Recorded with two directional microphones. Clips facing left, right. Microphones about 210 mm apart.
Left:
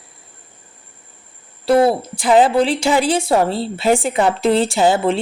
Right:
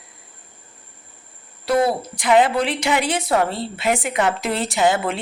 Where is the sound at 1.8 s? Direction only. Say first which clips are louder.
Left 4 dB; 30° left (ahead or behind).